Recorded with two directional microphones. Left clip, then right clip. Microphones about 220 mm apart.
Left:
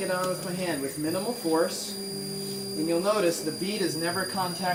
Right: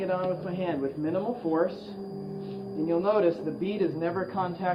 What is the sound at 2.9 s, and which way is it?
Speech, 15° left (ahead or behind).